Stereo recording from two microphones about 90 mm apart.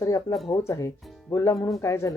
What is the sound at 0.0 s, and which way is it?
Speech, 35° left (ahead or behind).